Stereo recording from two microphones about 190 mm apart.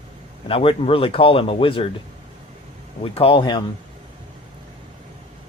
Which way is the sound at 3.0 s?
30° left (ahead or behind).